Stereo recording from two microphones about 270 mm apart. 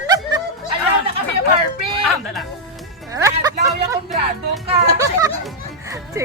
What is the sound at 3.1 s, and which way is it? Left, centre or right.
Music, centre.